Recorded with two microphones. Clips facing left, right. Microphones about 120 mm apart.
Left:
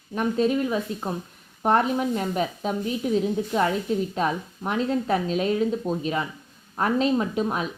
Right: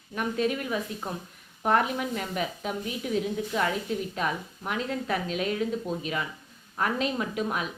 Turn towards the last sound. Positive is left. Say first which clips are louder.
# left 5 dB
turn(degrees=30)  # may be behind; listen again after turning